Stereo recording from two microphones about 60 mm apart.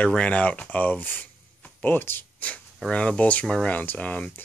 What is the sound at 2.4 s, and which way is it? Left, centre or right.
Speech, left.